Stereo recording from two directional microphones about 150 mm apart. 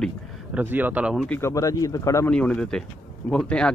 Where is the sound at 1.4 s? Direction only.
20° left (ahead or behind).